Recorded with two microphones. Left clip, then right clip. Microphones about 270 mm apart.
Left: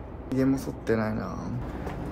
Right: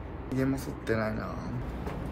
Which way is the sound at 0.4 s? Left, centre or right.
Centre.